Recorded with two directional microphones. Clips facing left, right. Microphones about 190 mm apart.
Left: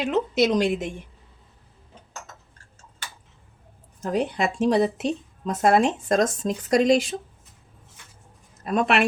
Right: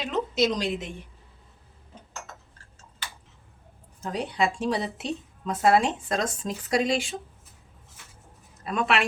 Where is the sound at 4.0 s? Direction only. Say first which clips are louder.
Left 3 dB; 50° left (ahead or behind).